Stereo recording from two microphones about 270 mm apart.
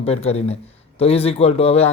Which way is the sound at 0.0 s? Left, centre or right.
Left.